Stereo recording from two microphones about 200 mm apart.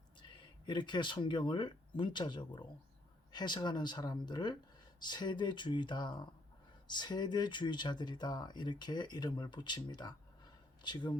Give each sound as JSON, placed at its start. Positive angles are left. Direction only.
{"t": 0.2, "sound": "speech", "side_deg": 25}